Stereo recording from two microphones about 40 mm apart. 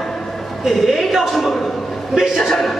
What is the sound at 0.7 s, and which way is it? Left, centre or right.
A man's voice, centre.